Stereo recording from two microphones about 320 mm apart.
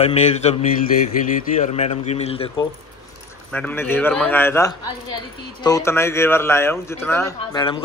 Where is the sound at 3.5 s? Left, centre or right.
Centre.